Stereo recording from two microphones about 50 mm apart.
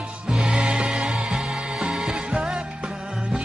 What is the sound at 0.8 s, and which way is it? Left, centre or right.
Music, centre.